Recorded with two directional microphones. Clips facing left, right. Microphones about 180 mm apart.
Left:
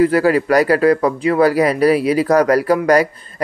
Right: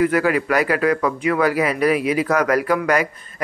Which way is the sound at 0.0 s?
35° left (ahead or behind).